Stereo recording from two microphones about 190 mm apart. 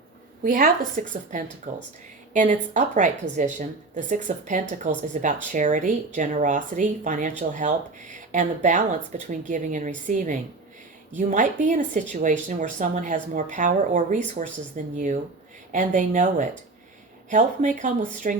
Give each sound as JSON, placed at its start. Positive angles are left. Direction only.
{"t": 0.4, "sound": "speech", "side_deg": -45}